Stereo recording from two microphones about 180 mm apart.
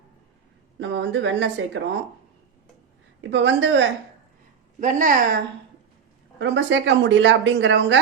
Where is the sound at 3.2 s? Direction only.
90° right.